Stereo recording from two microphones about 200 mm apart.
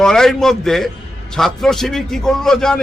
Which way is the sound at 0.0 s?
5° left (ahead or behind).